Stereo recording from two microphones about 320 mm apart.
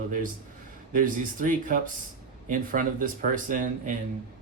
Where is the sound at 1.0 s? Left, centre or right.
Right.